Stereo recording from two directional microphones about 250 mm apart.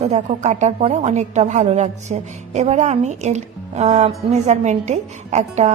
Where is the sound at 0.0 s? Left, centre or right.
Right.